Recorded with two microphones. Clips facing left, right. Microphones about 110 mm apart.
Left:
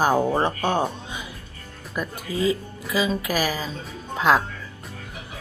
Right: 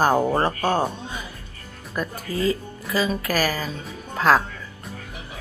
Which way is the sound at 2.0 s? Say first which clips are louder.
Even; 10° left (ahead or behind).